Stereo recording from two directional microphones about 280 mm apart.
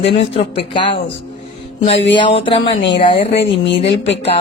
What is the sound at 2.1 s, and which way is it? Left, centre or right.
A woman's voice, centre.